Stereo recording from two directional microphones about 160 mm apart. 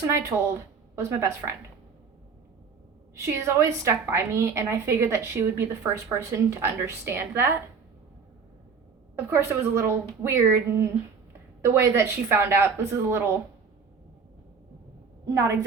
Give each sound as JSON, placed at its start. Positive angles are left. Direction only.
{"t": 0.0, "sound": "speech", "side_deg": -20}
{"t": 3.3, "sound": "a woman's voice", "side_deg": -20}
{"t": 9.3, "sound": "a woman's voice", "side_deg": -15}
{"t": 15.3, "sound": "a woman's voice", "side_deg": -20}